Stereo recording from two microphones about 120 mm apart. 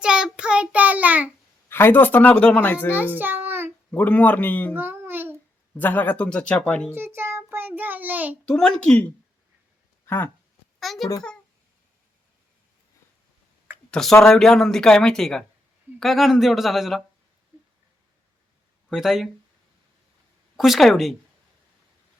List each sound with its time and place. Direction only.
0.0 s child singing: 5° right (ahead or behind)
1.7 s speech: 15° left (ahead or behind)
2.9 s child singing: 15° right (ahead or behind)
3.9 s speech: 15° left (ahead or behind)
4.7 s a sound: 15° right (ahead or behind)
5.7 s speech: 15° left (ahead or behind)
6.9 s child singing: 20° right (ahead or behind)
8.4 s speech: 5° left (ahead or behind)
10.8 s a child's voice: centre (ahead or behind)
13.9 s speech: 5° left (ahead or behind)
18.9 s speech: 5° right (ahead or behind)
20.6 s speech: centre (ahead or behind)